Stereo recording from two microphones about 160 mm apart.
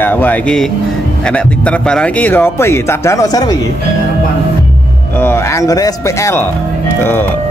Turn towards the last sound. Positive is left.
turn(degrees=20)  # may be behind; listen again after turning